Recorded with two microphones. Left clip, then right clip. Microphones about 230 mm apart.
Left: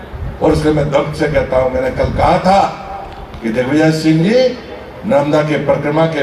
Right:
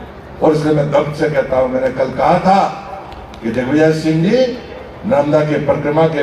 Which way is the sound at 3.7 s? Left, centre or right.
Left.